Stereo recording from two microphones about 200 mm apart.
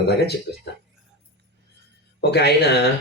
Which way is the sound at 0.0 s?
55° left (ahead or behind).